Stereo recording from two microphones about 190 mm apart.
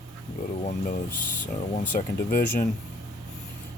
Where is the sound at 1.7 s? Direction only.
50° left (ahead or behind).